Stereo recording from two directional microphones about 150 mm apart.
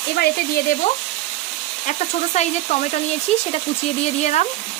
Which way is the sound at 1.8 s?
50° left (ahead or behind).